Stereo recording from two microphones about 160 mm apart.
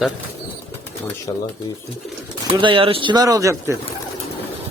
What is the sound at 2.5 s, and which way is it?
Speech, 30° right (ahead or behind).